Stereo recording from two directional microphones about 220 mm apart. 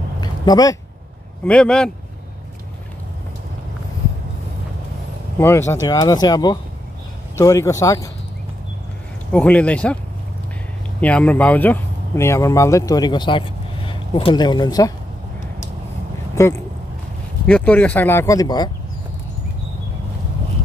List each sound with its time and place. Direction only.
0.2 s a sound: 15° left (ahead or behind)
1.4 s speech: 5° left (ahead or behind)
5.4 s speech: 10° left (ahead or behind)
9.3 s speech: 5° left (ahead or behind)
11.0 s speech: 5° left (ahead or behind)
16.4 s speech: 15° left (ahead or behind)